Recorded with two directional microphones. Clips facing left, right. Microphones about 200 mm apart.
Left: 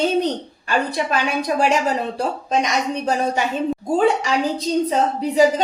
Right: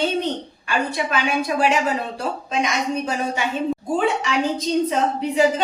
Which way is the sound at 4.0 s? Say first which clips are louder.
Left 4 dB; 40° left (ahead or behind).